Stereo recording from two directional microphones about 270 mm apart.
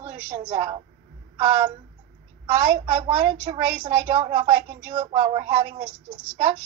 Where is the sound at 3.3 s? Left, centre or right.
Right.